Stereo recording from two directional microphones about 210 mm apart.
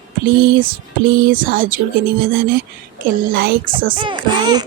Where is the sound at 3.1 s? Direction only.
45° right (ahead or behind).